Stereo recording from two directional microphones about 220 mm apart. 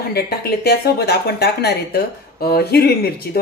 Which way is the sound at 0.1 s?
45° left (ahead or behind).